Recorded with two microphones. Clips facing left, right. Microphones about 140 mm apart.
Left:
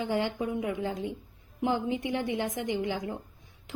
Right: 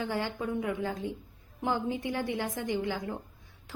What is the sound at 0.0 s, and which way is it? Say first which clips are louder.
A woman's voice: left 3 dB; 20° left (ahead or behind).